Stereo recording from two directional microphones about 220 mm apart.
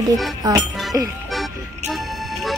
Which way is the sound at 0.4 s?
15° right (ahead or behind).